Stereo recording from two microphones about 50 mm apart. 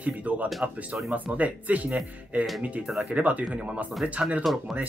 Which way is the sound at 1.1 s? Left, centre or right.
Right.